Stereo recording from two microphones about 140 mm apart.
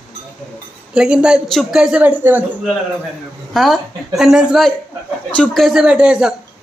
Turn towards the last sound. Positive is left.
turn(degrees=-5)  # may be behind; listen again after turning